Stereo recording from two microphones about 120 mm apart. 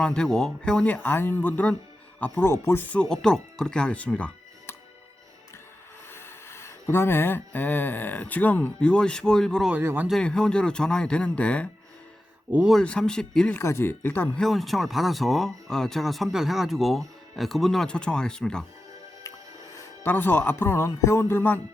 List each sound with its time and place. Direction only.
0.0 s speech: 5° left (ahead or behind)
6.1 s speech: 20° left (ahead or behind)
9.8 s a man's voice: 15° right (ahead or behind)
10.1 s speech: 5° left (ahead or behind)
13.6 s speech: 20° left (ahead or behind)
14.4 s speech: centre (ahead or behind)
19.7 s speech: 15° left (ahead or behind)